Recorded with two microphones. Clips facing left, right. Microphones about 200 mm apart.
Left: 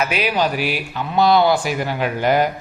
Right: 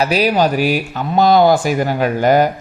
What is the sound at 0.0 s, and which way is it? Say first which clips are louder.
A man's voice: right 5 dB; 40° right (ahead or behind).